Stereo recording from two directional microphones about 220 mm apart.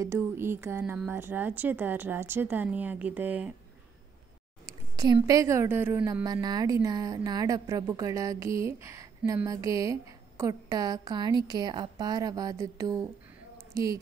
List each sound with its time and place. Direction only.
0.0 s a woman's voice: 10° right (ahead or behind)
4.6 s a woman's voice: 15° right (ahead or behind)